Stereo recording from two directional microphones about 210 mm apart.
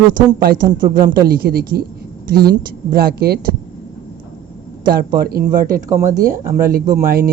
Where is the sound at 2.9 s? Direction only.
45° right (ahead or behind).